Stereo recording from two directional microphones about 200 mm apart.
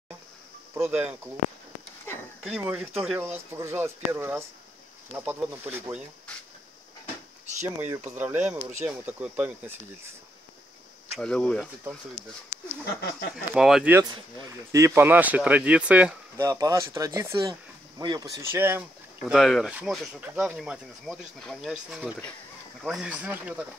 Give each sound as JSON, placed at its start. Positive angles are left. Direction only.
{"t": 0.9, "sound": "speech", "side_deg": -10}
{"t": 2.4, "sound": "speech", "side_deg": -5}
{"t": 8.2, "sound": "speech", "side_deg": -5}
{"t": 11.1, "sound": "speech", "side_deg": 5}
{"t": 12.8, "sound": "speech", "side_deg": 55}
{"t": 13.5, "sound": "speech", "side_deg": 0}
{"t": 14.0, "sound": "speech", "side_deg": -20}